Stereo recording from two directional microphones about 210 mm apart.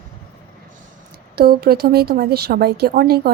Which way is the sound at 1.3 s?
45° right (ahead or behind).